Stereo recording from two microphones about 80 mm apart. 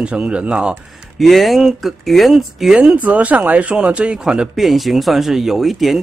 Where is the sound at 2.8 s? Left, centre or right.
Centre.